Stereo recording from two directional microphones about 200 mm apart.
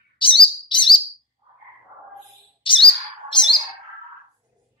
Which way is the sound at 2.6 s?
25° left (ahead or behind).